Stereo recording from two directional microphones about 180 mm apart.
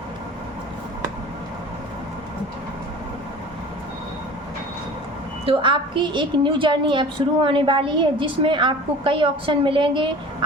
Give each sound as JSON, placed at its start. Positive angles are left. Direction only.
{"t": 5.5, "sound": "a woman's voice", "side_deg": -30}